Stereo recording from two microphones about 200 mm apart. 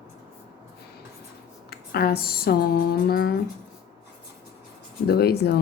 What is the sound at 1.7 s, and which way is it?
Speech, 50° left (ahead or behind).